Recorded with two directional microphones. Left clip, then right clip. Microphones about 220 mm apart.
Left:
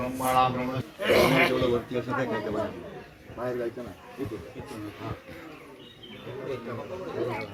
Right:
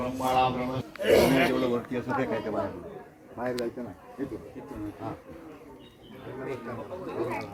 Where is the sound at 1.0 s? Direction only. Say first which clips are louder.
Even; 55° right (ahead or behind).